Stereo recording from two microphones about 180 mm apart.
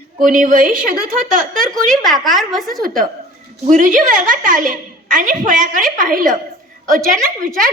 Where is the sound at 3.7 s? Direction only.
45° right (ahead or behind).